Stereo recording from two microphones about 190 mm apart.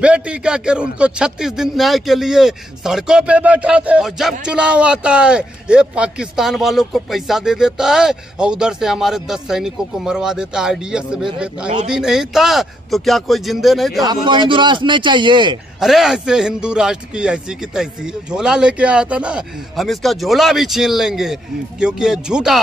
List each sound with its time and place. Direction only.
0.0 s a man's voice: 5° right (ahead or behind)
14.2 s a man's voice: 25° right (ahead or behind)
15.8 s a man's voice: centre (ahead or behind)